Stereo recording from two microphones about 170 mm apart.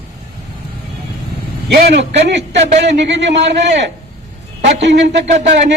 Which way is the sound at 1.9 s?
85° right.